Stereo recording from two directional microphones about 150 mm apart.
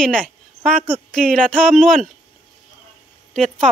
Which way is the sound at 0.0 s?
5° left (ahead or behind).